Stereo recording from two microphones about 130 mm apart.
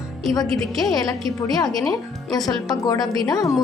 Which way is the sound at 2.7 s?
30° left (ahead or behind).